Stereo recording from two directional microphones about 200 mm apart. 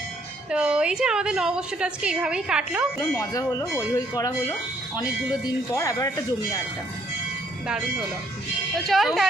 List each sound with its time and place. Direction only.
0.5 s a woman's voice: 5° right (ahead or behind)
3.2 s speech: 20° left (ahead or behind)
8.9 s a woman's voice: centre (ahead or behind)